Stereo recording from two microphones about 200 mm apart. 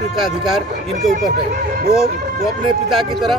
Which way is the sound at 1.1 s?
45° right (ahead or behind).